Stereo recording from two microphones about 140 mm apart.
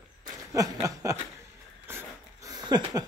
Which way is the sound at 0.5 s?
25° right (ahead or behind).